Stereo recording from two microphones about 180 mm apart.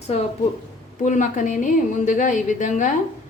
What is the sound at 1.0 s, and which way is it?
Speech, 45° left (ahead or behind).